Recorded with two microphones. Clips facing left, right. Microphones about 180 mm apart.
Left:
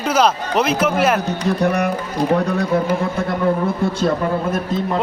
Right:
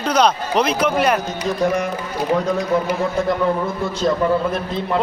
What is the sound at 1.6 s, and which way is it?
Speech, 65° left (ahead or behind).